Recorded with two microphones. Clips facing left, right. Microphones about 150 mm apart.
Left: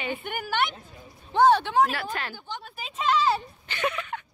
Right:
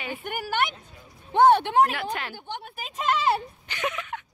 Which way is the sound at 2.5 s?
55° right (ahead or behind).